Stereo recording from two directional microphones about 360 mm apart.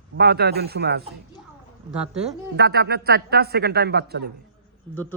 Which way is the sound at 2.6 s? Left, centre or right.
Right.